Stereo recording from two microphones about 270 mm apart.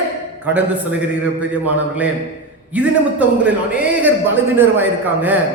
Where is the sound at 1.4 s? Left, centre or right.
Centre.